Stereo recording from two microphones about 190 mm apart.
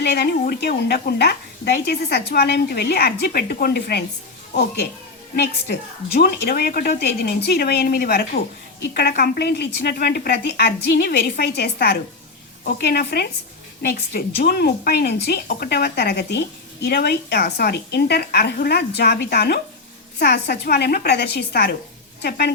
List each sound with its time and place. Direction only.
0.0 s a woman's voice: 60° left (ahead or behind)
5.4 s a woman's voice: 60° left (ahead or behind)